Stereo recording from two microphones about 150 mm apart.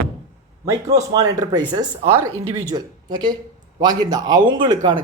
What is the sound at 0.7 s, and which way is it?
Speech, 20° right (ahead or behind).